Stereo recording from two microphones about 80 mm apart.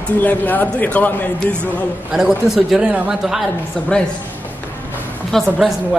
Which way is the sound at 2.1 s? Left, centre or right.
Centre.